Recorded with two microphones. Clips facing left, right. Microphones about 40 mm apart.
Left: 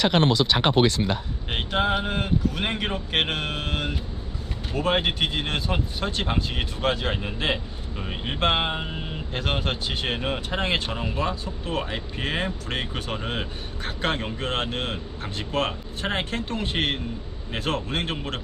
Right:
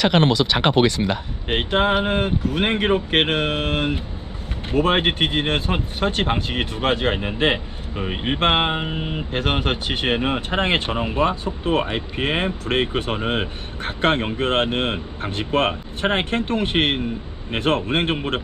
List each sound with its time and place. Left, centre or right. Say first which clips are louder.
0.2 s speech: right 3 dB; right
1.5 s speech: right 5 dB; right